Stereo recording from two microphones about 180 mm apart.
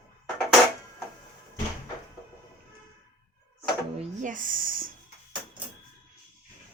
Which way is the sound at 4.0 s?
45° right (ahead or behind).